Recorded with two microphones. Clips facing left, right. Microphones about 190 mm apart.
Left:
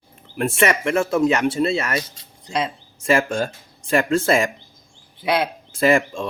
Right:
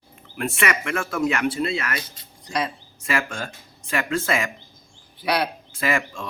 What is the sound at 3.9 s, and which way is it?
Speech, 30° left (ahead or behind).